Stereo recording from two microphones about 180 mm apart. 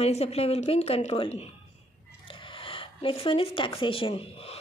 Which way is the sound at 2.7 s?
30° left (ahead or behind).